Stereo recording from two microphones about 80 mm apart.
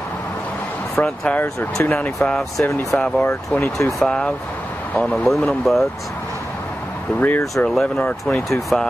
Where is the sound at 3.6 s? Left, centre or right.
Left.